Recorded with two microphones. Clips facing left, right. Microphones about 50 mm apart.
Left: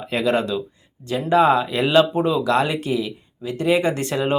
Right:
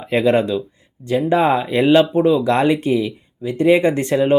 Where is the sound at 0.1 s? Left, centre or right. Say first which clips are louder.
Right 5 dB; right.